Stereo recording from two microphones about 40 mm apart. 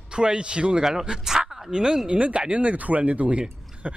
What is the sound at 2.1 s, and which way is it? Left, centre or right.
Speech, right.